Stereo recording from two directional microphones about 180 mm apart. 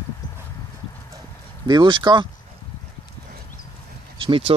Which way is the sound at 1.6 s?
25° right (ahead or behind).